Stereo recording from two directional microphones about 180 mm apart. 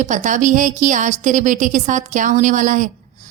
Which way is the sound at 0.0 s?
45° right (ahead or behind).